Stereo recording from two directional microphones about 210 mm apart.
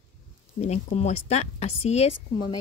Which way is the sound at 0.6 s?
30° left (ahead or behind).